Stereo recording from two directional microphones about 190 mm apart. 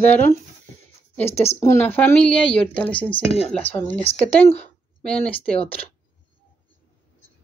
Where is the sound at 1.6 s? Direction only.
15° left (ahead or behind).